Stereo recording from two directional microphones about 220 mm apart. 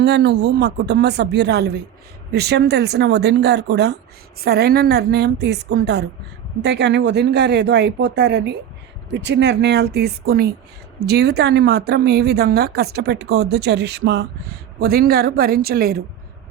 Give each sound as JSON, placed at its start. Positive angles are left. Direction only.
{"t": 0.0, "sound": "speech", "side_deg": -50}